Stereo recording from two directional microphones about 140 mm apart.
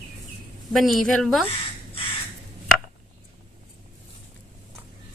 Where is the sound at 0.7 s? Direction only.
Centre (ahead or behind).